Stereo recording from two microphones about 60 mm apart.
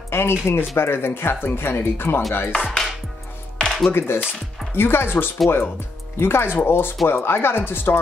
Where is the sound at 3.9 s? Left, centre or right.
Left.